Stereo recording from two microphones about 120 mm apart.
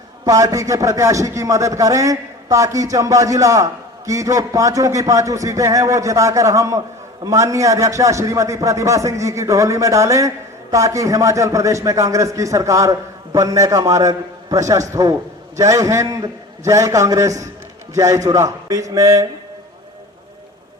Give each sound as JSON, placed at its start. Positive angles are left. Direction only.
{"t": 0.3, "sound": "a man's voice", "side_deg": -30}